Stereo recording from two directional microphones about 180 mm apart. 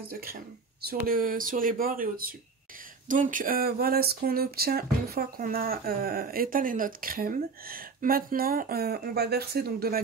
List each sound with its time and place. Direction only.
0.1 s speech: 55° right (ahead or behind)